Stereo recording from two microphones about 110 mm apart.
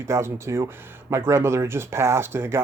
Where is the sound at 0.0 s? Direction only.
25° right (ahead or behind).